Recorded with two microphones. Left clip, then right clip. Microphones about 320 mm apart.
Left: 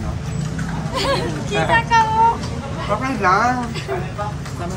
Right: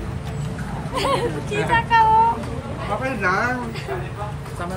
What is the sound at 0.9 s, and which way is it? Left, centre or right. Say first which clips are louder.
Speech: left 1 dB; centre.